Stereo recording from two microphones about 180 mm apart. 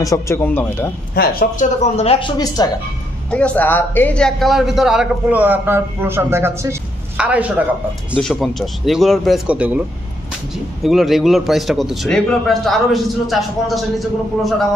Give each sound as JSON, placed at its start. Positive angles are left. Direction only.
{"t": 0.0, "sound": "speech", "side_deg": 15}
{"t": 1.2, "sound": "a man's voice", "side_deg": 55}
{"t": 2.0, "sound": "speech", "side_deg": 30}
{"t": 3.3, "sound": "a man's voice", "side_deg": 5}